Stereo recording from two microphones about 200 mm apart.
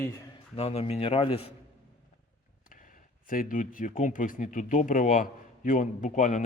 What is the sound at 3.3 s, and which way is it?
Speech, 45° left (ahead or behind).